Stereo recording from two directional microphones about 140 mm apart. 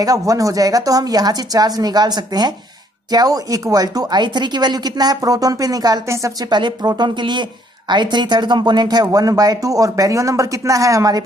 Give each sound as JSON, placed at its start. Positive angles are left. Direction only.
{"t": 0.0, "sound": "speech", "side_deg": -25}